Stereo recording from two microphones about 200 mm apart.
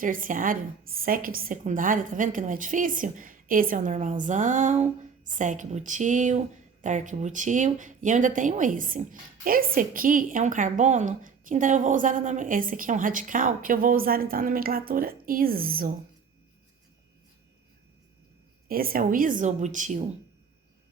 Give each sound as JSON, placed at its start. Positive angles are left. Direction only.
{"t": 0.0, "sound": "speech", "side_deg": -45}
{"t": 18.7, "sound": "speech", "side_deg": -45}